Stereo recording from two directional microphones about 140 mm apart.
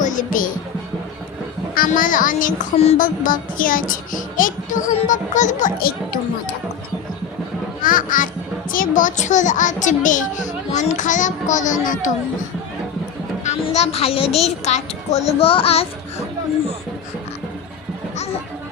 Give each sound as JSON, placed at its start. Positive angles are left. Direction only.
{"t": 0.0, "sound": "speech", "side_deg": 70}
{"t": 1.7, "sound": "music", "side_deg": 85}
{"t": 2.7, "sound": "a child's voice", "side_deg": 50}
{"t": 3.0, "sound": "music", "side_deg": 75}
{"t": 4.9, "sound": "a child's voice", "side_deg": 60}
{"t": 7.8, "sound": "music", "side_deg": 80}
{"t": 8.7, "sound": "a child's voice", "side_deg": 75}
{"t": 13.6, "sound": "a child's voice", "side_deg": 45}